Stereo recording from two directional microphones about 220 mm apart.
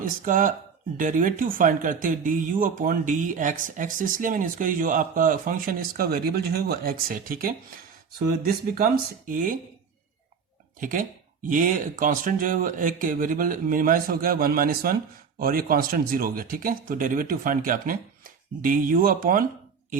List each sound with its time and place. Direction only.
0.0 s speech: 35° right (ahead or behind)
10.8 s speech: 40° right (ahead or behind)